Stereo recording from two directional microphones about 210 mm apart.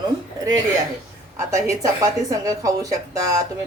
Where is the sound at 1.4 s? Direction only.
15° right (ahead or behind).